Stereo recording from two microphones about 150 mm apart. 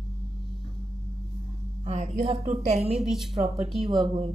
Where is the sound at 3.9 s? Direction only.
30° right (ahead or behind).